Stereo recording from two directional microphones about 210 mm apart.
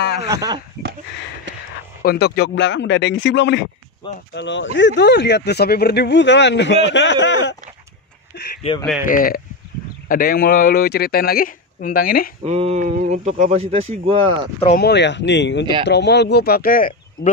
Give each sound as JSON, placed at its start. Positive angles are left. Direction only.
{"t": 0.0, "sound": "a sound", "side_deg": 50}
{"t": 0.3, "sound": "speech", "side_deg": -15}
{"t": 2.0, "sound": "speech", "side_deg": 50}
{"t": 8.3, "sound": "speech", "side_deg": 45}
{"t": 12.4, "sound": "speech", "side_deg": -30}
{"t": 14.8, "sound": "speech", "side_deg": 55}